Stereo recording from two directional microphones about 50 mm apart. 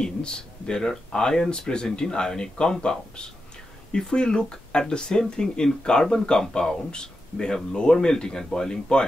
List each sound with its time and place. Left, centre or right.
0.0 s speech: centre